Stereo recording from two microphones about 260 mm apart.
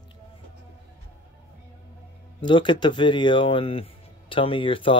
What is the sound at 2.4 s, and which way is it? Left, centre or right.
Speech, centre.